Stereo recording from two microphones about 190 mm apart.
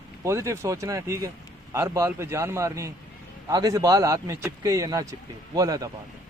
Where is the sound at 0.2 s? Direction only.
15° right (ahead or behind).